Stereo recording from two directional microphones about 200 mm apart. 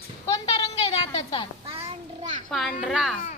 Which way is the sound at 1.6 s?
30° right (ahead or behind).